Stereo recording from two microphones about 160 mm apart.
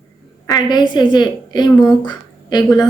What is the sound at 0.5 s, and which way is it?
A woman's voice, 25° left (ahead or behind).